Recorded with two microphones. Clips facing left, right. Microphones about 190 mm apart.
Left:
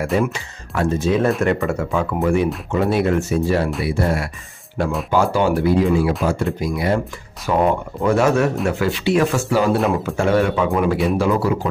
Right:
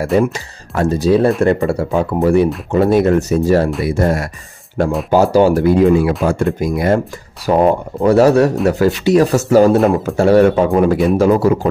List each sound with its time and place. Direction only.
0.0 s speech: 40° right (ahead or behind)
7.4 s speech: 35° right (ahead or behind)